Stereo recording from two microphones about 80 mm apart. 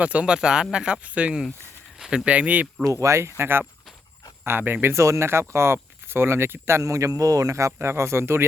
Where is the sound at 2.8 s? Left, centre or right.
Right.